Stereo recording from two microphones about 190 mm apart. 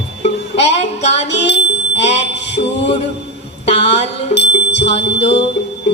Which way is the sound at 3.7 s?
35° left (ahead or behind).